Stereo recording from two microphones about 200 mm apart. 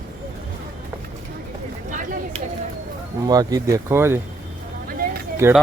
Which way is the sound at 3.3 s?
20° right (ahead or behind).